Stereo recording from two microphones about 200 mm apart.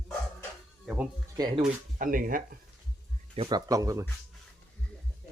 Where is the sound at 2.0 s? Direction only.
45° right (ahead or behind).